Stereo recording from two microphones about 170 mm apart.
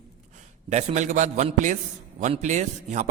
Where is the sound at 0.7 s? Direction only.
40° right (ahead or behind).